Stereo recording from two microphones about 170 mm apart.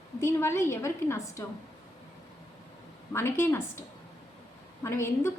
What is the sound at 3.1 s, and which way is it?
Speech, 15° left (ahead or behind).